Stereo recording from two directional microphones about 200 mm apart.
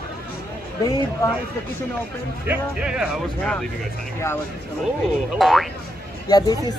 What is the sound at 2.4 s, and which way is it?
Speech, 5° right (ahead or behind).